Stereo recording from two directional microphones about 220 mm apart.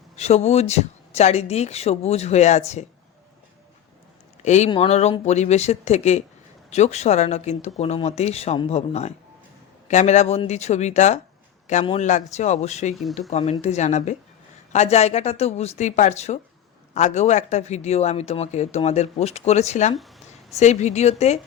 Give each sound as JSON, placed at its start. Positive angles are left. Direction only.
{"t": 0.2, "sound": "speech", "side_deg": 30}
{"t": 4.4, "sound": "speech", "side_deg": 30}